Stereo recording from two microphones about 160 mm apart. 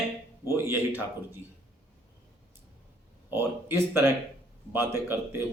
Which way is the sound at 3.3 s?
15° right (ahead or behind).